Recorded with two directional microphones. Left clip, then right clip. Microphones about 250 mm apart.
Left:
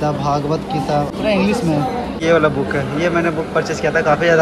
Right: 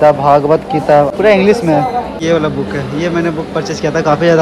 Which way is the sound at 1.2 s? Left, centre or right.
Right.